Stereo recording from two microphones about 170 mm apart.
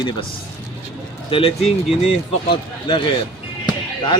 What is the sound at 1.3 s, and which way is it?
Speech, 35° left (ahead or behind).